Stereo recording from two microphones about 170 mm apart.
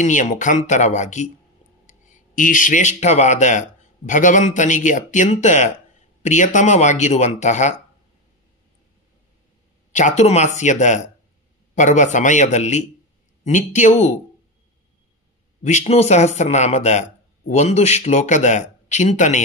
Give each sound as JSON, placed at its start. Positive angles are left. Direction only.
{"t": 0.0, "sound": "speech", "side_deg": 45}
{"t": 9.9, "sound": "speech", "side_deg": 45}
{"t": 15.6, "sound": "a man's voice", "side_deg": 40}